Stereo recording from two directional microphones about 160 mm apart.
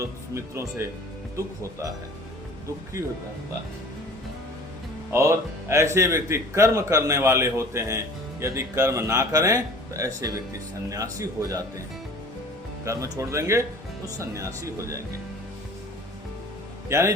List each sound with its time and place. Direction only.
0.0 s speech: 20° right (ahead or behind)
5.1 s speech: 15° right (ahead or behind)
12.8 s speech: 20° right (ahead or behind)
16.9 s speech: 15° right (ahead or behind)